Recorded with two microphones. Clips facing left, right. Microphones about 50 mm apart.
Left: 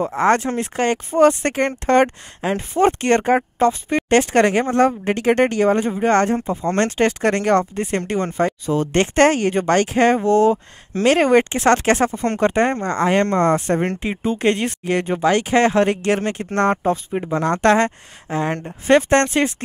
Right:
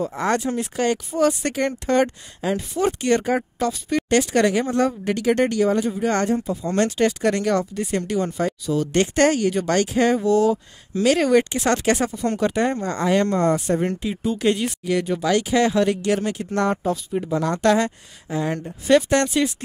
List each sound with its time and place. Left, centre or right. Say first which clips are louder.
0.1 s speech: left 5 dB; left